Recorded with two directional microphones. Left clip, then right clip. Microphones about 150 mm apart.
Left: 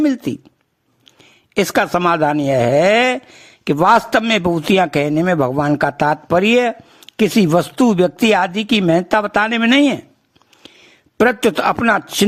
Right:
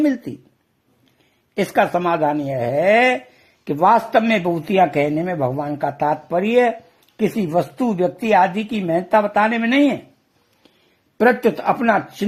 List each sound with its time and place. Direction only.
0.0 s speech: 30° left (ahead or behind)
1.5 s a man's voice: 35° left (ahead or behind)
11.2 s a man's voice: 50° left (ahead or behind)